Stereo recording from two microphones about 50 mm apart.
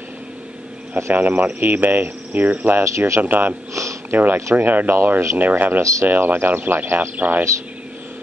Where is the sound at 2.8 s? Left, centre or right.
Right.